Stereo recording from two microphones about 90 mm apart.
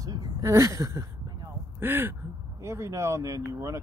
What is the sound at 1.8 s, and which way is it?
Speech, 25° right (ahead or behind).